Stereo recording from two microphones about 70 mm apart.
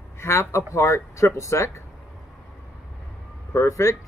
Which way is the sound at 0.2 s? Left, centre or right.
Left.